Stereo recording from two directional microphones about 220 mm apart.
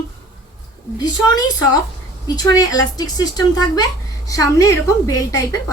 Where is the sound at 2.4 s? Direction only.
15° left (ahead or behind).